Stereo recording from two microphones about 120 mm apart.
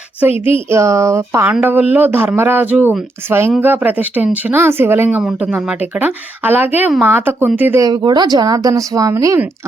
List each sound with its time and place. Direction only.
0.7 s speech: 25° right (ahead or behind)
7.8 s speech: 35° right (ahead or behind)